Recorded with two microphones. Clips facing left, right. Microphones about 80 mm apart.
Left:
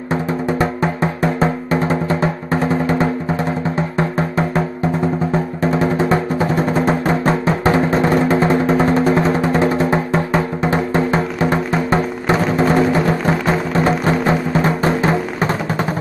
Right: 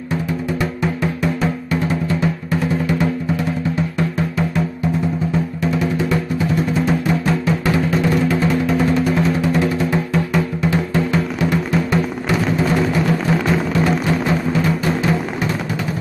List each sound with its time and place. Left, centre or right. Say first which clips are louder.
0.1 s music: left 3 dB; left